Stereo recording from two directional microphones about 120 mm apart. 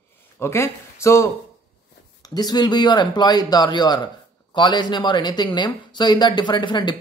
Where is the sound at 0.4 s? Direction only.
20° left (ahead or behind).